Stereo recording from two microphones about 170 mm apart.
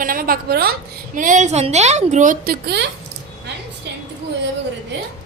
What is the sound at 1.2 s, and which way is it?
A woman's voice, 50° right (ahead or behind).